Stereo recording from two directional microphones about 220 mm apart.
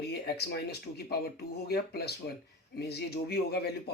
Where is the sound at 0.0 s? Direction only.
50° left (ahead or behind).